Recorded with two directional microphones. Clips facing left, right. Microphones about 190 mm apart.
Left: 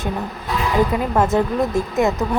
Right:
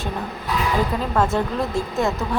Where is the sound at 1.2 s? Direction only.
20° left (ahead or behind).